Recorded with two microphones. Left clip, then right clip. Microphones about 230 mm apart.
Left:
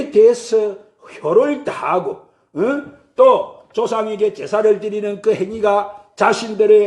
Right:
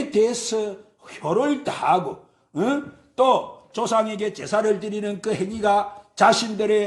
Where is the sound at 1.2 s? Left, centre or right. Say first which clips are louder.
Left 7 dB; right.